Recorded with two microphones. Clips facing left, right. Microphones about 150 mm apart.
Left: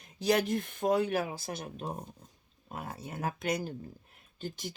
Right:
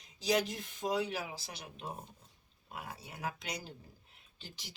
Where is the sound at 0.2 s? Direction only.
55° left (ahead or behind).